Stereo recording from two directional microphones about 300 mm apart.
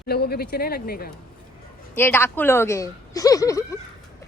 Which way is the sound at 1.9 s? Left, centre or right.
Centre.